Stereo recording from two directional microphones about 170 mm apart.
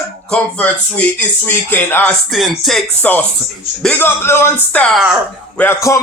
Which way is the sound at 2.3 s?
Centre (ahead or behind).